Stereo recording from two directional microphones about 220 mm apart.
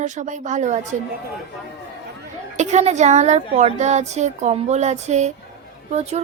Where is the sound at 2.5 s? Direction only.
30° right (ahead or behind).